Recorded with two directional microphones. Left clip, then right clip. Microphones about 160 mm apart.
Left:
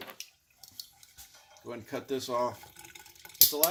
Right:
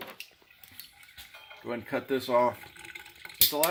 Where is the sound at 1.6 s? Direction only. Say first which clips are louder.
Right 5 dB; 40° right (ahead or behind).